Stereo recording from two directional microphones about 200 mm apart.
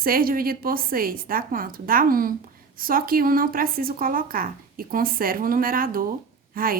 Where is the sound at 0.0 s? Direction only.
45° right (ahead or behind).